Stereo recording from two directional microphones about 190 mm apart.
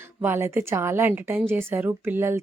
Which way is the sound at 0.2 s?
10° right (ahead or behind).